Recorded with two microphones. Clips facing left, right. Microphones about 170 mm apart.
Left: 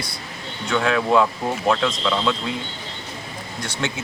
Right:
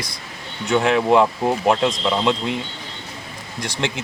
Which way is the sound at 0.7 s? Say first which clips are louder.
Right 3 dB; 20° right (ahead or behind).